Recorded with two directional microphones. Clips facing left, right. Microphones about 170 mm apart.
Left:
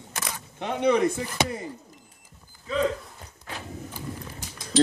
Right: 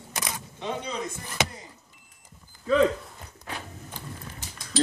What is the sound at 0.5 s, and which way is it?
Speech, 65° left (ahead or behind).